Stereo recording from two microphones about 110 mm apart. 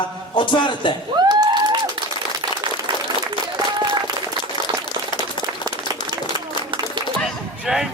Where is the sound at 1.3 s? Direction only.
40° right (ahead or behind).